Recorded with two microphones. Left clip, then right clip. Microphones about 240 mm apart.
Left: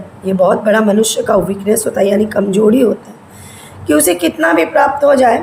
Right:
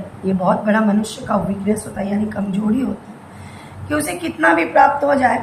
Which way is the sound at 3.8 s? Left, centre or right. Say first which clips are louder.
Left 10 dB; left.